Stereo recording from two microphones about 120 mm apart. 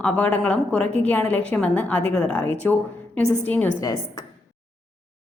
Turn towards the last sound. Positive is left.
turn(degrees=30)  # may be behind; listen again after turning